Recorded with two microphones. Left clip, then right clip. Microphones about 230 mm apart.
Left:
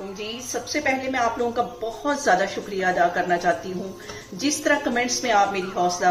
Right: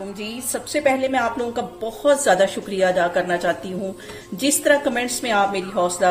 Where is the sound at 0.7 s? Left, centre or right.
Right.